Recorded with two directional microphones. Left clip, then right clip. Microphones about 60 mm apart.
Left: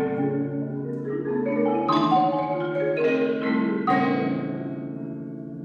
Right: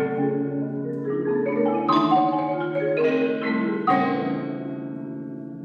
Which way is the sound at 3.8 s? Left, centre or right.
Left.